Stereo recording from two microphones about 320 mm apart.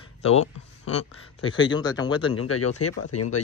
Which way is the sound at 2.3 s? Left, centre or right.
Left.